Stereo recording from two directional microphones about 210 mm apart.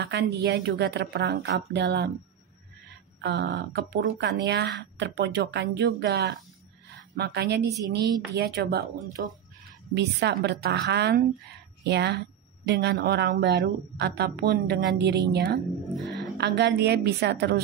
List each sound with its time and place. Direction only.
0.0 s speech: 50° right (ahead or behind)
3.2 s speech: 55° right (ahead or behind)
16.0 s music: centre (ahead or behind)
16.3 s speech: 55° right (ahead or behind)